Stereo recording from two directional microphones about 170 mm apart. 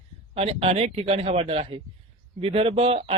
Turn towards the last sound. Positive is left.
turn(degrees=-35)  # may be behind; listen again after turning